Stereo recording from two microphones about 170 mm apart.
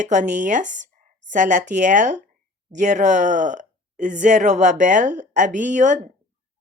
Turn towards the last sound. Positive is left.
turn(degrees=-45)  # may be behind; listen again after turning